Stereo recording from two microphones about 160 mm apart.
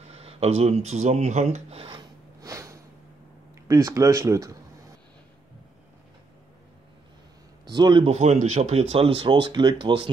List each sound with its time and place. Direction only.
0.1 s speech: 40° right (ahead or behind)
2.4 s snort: 20° right (ahead or behind)
3.5 s speech: 20° right (ahead or behind)
7.7 s speech: 30° right (ahead or behind)